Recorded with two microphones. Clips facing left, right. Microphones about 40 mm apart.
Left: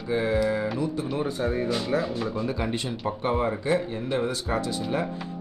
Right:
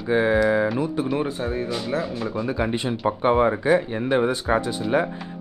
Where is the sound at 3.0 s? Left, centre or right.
Right.